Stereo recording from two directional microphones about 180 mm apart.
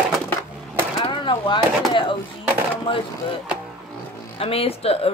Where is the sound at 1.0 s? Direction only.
25° left (ahead or behind).